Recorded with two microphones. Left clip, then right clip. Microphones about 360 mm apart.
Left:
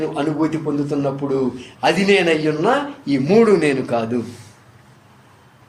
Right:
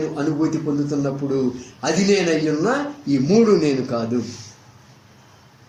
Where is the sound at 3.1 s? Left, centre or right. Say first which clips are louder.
Left 2 dB; left.